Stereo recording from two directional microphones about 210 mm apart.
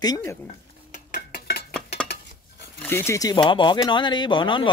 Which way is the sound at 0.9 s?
45° left (ahead or behind).